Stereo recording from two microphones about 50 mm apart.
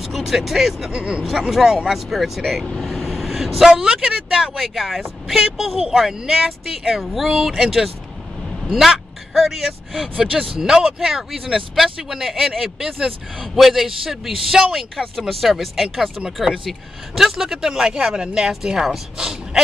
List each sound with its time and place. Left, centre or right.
0.0 s speech: centre
0.9 s speech: right
1.5 s speech: centre
13.6 s speech: centre